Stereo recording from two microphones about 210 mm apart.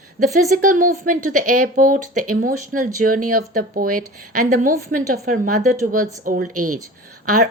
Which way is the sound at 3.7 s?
45° right (ahead or behind).